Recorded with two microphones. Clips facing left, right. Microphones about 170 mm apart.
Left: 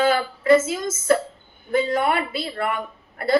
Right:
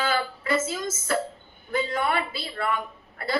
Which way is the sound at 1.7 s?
45° left (ahead or behind).